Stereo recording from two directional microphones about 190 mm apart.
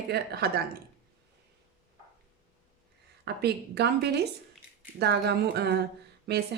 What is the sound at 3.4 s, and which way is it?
A woman's voice, 60° right (ahead or behind).